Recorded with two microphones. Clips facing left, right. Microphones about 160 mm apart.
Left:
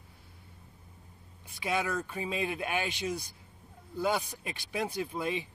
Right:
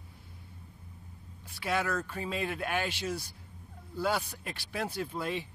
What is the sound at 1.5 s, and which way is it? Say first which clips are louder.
Speech: even; 15° left (ahead or behind).